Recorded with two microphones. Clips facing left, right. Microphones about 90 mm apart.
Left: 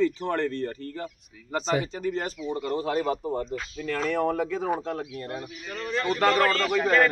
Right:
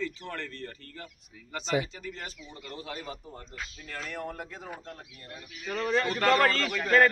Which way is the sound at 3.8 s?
90° left.